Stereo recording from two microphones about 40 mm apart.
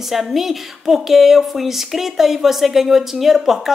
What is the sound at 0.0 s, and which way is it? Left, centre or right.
A woman's voice, centre.